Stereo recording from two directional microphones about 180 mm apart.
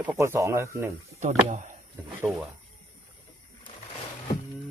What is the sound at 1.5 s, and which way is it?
Speech, 45° right (ahead or behind).